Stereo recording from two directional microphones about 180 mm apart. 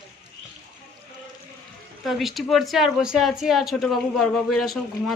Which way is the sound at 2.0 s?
Centre (ahead or behind).